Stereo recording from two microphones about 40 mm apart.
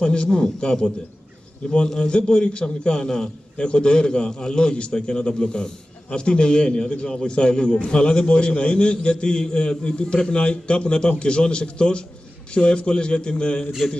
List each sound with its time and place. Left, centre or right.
0.0 s a man's voice: left